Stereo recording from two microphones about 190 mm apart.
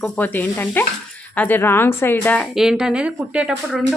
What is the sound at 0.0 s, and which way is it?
A woman's voice, 10° left (ahead or behind).